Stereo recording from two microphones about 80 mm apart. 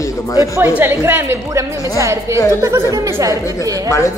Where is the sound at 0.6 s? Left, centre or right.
Right.